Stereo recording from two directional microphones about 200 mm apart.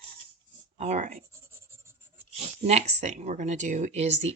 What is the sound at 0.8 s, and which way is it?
Speech, 35° right (ahead or behind).